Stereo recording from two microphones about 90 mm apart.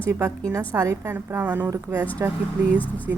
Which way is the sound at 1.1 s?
25° right (ahead or behind).